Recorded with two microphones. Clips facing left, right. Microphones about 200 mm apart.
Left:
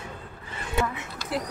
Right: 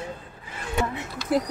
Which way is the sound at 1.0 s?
40° right (ahead or behind).